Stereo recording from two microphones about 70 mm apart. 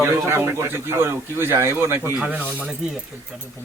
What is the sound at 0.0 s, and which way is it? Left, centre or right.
Speech, right.